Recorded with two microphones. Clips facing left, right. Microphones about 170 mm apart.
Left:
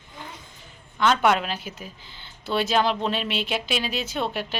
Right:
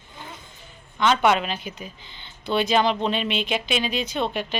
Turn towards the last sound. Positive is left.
turn(degrees=5)  # may be behind; listen again after turning